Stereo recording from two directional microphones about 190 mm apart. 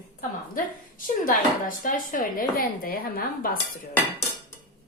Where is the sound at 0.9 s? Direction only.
45° left (ahead or behind).